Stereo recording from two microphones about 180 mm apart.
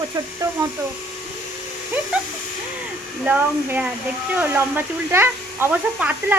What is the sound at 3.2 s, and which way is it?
Speech, 10° right (ahead or behind).